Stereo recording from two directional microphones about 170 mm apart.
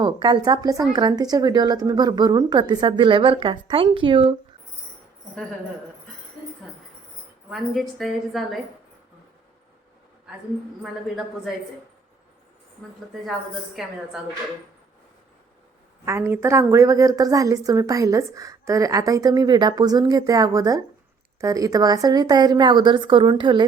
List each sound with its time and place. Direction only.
0.0 s a woman's voice: 25° right (ahead or behind)
7.5 s a woman's voice: centre (ahead or behind)
13.8 s a woman's voice: centre (ahead or behind)
16.0 s a woman's voice: 15° right (ahead or behind)